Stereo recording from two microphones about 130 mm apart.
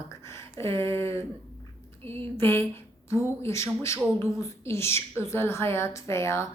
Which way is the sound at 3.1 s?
20° left (ahead or behind).